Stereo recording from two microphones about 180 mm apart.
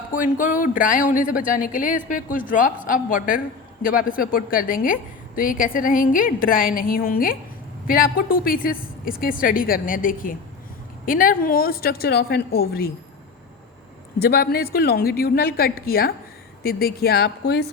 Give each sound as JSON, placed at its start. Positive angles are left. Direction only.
{"t": 0.1, "sound": "a woman's voice", "side_deg": 50}
{"t": 14.2, "sound": "a woman's voice", "side_deg": 60}